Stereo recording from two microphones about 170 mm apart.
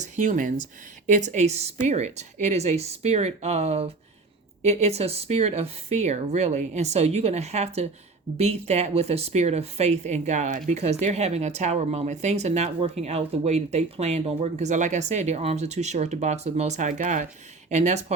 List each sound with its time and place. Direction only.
0.0 s speech: 45° right (ahead or behind)